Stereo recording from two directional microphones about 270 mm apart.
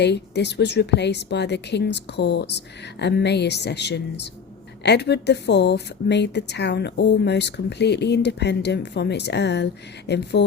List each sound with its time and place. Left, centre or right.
0.0 s speech: left